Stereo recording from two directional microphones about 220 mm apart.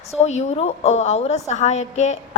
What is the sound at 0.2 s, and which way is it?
A woman's voice, 30° left (ahead or behind).